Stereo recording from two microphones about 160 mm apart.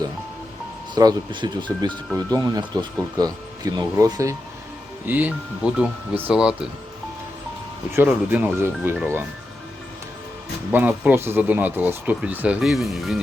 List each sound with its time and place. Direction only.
0.9 s speech: 25° right (ahead or behind); by 6.6 s 5° right (ahead or behind)
7.9 s speech: 10° right (ahead or behind)
10.7 s speech: 10° right (ahead or behind)